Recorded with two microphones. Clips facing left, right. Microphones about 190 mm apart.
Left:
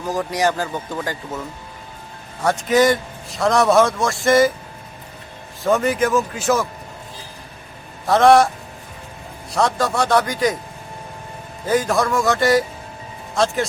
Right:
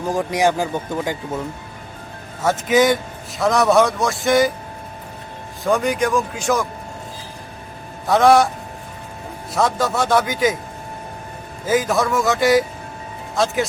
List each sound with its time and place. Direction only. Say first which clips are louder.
0.1 s speech: right 2 dB; 20° right (ahead or behind)
2.4 s a man's voice: even; centre (ahead or behind)
5.6 s a man's voice: left 1 dB; centre (ahead or behind)
8.0 s a man's voice: left 1 dB; centre (ahead or behind)
9.5 s a man's voice: even; centre (ahead or behind)
11.6 s a man's voice: even; centre (ahead or behind)